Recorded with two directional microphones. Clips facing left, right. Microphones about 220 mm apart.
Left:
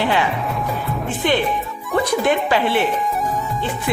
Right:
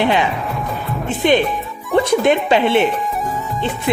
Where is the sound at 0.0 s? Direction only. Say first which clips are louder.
Right 3 dB; 20° right (ahead or behind).